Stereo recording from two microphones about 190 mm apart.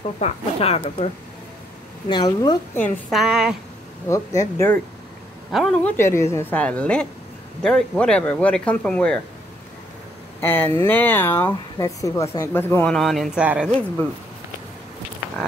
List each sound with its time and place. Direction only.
0.0 s speech: 35° left (ahead or behind)
3.1 s speech: centre (ahead or behind)
4.1 s speech: 15° left (ahead or behind)
5.5 s speech: centre (ahead or behind)
5.9 s speech: 15° left (ahead or behind)
10.4 s speech: 10° left (ahead or behind); by 13.7 s 5° right (ahead or behind)